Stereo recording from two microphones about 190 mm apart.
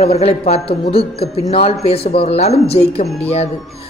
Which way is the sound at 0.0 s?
35° left (ahead or behind).